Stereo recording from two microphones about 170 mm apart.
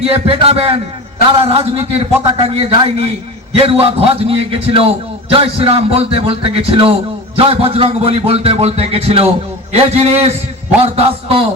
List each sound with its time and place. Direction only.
0.1 s a man's voice: 35° right (ahead or behind)